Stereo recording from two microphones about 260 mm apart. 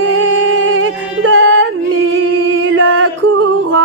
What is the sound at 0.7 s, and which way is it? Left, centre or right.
Music, right.